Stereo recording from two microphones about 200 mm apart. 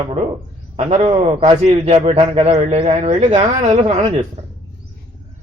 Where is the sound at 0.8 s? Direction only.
35° right (ahead or behind).